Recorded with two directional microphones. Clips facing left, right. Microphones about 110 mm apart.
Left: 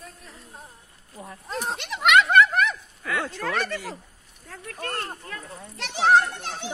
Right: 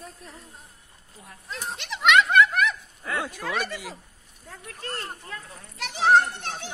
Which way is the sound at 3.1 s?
15° right (ahead or behind).